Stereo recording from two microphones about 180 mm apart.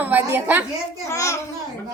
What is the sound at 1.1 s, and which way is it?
Speech, 15° left (ahead or behind).